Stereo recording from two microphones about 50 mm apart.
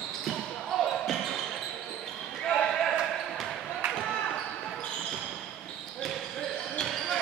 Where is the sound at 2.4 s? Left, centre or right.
Centre.